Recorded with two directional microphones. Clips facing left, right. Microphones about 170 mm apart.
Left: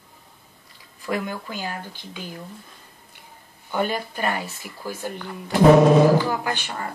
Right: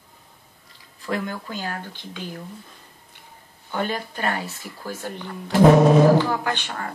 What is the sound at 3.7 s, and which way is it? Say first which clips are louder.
Speech: left 2 dB; 10° left (ahead or behind).